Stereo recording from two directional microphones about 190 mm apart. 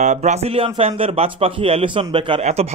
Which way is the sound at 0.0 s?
40° right (ahead or behind).